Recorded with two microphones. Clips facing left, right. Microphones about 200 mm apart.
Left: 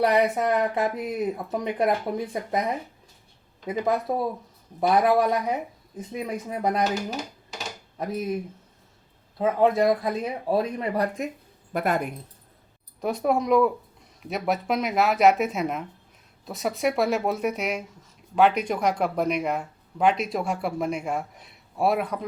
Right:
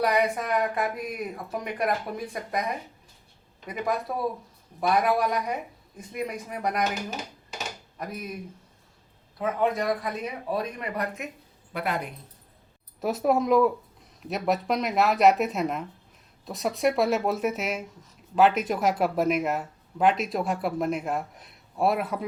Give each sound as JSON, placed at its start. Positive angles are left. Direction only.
{"t": 0.0, "sound": "speech", "side_deg": 25}
{"t": 4.1, "sound": "speech", "side_deg": 25}
{"t": 9.4, "sound": "speech", "side_deg": 30}
{"t": 11.7, "sound": "a woman's voice", "side_deg": 45}
{"t": 13.0, "sound": "speech", "side_deg": 0}